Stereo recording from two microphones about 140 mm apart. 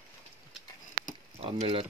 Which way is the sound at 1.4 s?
45° right (ahead or behind).